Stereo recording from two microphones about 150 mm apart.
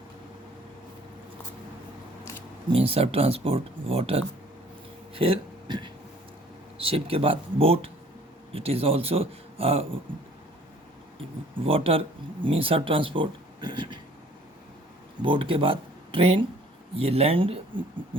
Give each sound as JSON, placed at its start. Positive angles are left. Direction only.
{"t": 2.7, "sound": "speech", "side_deg": -40}
{"t": 5.1, "sound": "a sound", "side_deg": -40}
{"t": 6.7, "sound": "speech", "side_deg": -40}
{"t": 11.2, "sound": "speech", "side_deg": -40}
{"t": 15.2, "sound": "speech", "side_deg": -35}